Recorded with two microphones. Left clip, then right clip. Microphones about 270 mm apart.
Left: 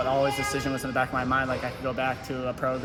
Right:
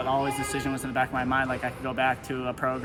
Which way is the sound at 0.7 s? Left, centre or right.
Centre.